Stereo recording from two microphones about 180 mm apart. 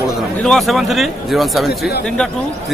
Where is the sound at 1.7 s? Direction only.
65° left (ahead or behind).